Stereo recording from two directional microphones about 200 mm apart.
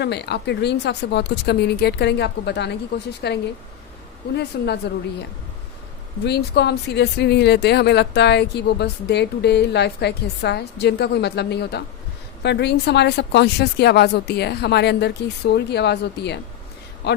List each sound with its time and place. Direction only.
0.0 s speech: 55° left (ahead or behind)
6.2 s a man's voice: 55° left (ahead or behind)